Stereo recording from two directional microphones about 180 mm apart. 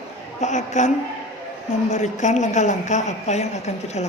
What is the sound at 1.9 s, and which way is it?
A woman's voice, 40° left (ahead or behind).